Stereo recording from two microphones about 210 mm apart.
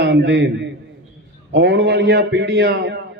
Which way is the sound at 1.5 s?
55° right (ahead or behind).